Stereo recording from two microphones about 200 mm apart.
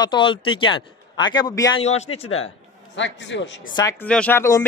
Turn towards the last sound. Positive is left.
turn(degrees=10)  # may be behind; listen again after turning